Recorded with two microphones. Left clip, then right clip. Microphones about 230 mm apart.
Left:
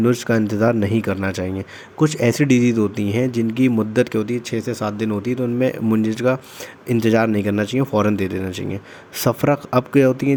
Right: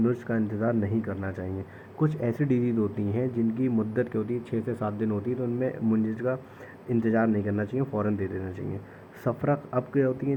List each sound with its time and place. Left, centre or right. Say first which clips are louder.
0.0 s speech: left 10 dB; left